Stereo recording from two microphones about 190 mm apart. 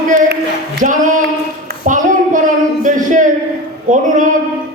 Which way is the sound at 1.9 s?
45° right (ahead or behind).